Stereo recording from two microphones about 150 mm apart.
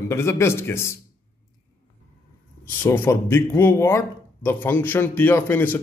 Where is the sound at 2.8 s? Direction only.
15° left (ahead or behind).